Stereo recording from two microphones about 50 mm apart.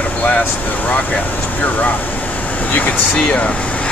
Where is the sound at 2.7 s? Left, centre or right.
Left.